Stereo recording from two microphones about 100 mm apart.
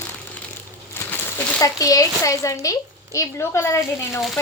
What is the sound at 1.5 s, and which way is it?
A woman's voice, 35° left (ahead or behind).